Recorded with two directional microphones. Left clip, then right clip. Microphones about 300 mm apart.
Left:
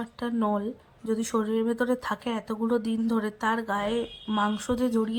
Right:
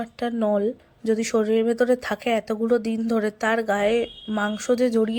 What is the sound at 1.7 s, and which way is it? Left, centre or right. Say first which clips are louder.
A woman's voice: right 6 dB; centre.